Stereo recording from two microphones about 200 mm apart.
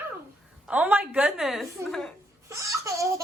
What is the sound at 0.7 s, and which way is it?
A woman's voice, 5° right (ahead or behind).